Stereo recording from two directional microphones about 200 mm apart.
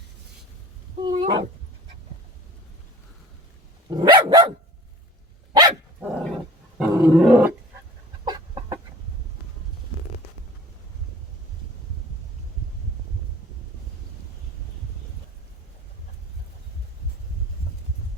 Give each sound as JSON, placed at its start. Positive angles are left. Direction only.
{"t": 1.0, "sound": "dog", "side_deg": -25}
{"t": 3.8, "sound": "dog", "side_deg": -20}
{"t": 6.0, "sound": "dog", "side_deg": -5}
{"t": 6.7, "sound": "roar", "side_deg": 0}
{"t": 8.2, "sound": "chicken", "side_deg": -20}